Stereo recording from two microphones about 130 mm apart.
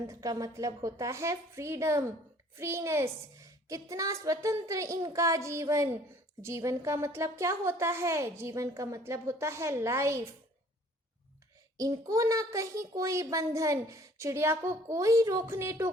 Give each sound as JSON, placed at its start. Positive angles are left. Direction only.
{"t": 0.1, "sound": "a child's voice", "side_deg": -25}
{"t": 11.8, "sound": "a child's voice", "side_deg": -25}